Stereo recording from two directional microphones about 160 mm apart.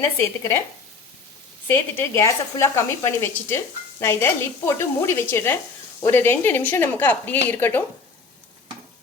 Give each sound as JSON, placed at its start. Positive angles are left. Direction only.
{"t": 0.2, "sound": "a woman's voice", "side_deg": 15}
{"t": 1.6, "sound": "a woman's voice", "side_deg": 15}